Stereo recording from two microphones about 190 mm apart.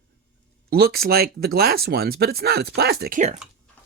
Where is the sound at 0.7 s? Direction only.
55° right (ahead or behind).